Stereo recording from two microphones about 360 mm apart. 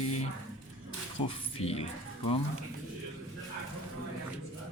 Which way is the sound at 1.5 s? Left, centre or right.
Centre.